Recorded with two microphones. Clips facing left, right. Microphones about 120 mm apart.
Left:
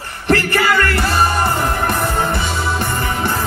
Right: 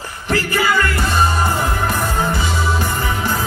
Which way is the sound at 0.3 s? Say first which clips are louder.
Left 3 dB; 65° left (ahead or behind).